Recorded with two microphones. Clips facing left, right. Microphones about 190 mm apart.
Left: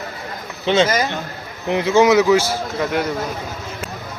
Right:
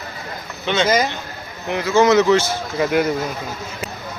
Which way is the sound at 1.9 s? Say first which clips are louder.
Even; 10° left (ahead or behind).